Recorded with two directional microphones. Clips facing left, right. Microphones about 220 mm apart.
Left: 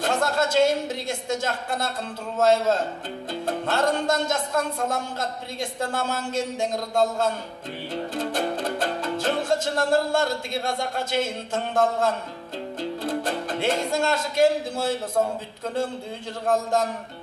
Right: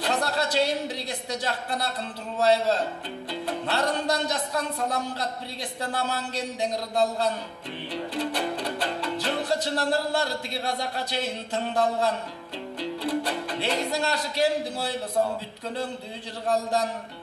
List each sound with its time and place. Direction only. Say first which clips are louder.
0.0 s a woman's voice: left 3 dB; 45° left (ahead or behind)
7.9 s music: left 2 dB; 45° left (ahead or behind)
16.4 s speech: left 2 dB; 50° left (ahead or behind)